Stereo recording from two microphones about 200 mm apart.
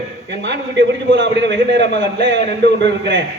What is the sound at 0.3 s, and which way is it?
A man's voice, 60° right (ahead or behind).